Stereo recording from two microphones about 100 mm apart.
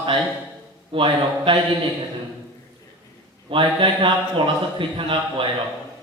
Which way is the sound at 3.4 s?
60° right (ahead or behind).